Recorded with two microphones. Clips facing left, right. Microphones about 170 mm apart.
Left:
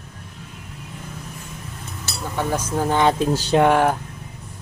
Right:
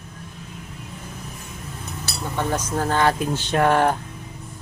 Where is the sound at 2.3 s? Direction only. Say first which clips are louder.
Left 1 dB; 10° left (ahead or behind).